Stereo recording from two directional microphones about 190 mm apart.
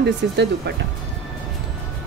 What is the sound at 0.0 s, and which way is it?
Speech, 60° right (ahead or behind).